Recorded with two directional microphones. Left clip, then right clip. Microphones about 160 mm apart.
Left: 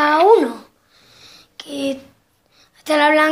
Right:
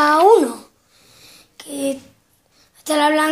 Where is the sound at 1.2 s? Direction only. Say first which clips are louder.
Left 4 dB; 20° left (ahead or behind).